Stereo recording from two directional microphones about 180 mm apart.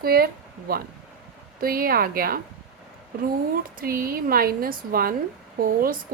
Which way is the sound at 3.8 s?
50° right (ahead or behind).